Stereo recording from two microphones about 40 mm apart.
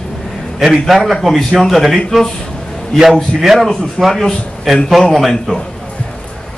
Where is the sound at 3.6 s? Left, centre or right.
Centre.